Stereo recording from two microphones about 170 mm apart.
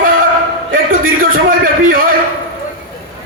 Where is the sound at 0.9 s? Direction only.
55° right (ahead or behind).